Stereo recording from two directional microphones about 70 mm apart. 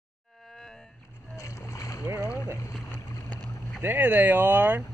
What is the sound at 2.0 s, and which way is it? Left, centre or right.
Boat, right.